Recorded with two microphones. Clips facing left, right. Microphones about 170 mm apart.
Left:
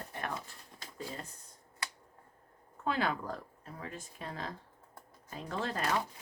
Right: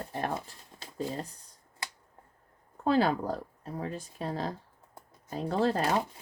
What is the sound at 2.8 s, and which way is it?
Speech, 35° right (ahead or behind).